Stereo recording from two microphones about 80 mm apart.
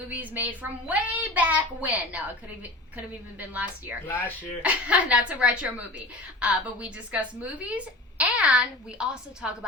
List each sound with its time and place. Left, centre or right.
0.1 s a woman's voice: centre
3.5 s a woman's voice: right
4.0 s speech: left
4.6 s a woman's voice: centre